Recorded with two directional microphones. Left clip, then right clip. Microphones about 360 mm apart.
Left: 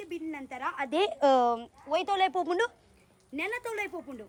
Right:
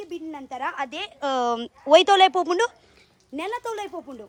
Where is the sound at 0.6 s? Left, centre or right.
Centre.